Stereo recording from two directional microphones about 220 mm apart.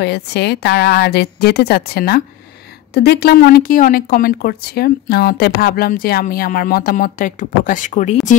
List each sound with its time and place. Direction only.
0.0 s a woman's voice: 50° left (ahead or behind)